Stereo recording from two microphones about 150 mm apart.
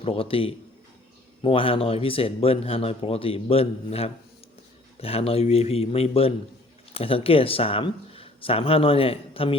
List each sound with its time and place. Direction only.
0.0 s speech: 40° left (ahead or behind)